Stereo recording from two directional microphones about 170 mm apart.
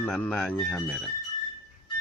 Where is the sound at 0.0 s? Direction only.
5° left (ahead or behind).